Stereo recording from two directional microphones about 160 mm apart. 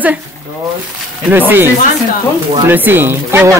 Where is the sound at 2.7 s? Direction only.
10° right (ahead or behind).